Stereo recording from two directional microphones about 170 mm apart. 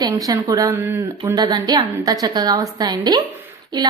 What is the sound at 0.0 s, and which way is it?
A woman's voice, 20° right (ahead or behind).